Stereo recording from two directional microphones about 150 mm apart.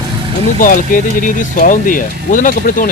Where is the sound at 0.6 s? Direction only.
65° left (ahead or behind).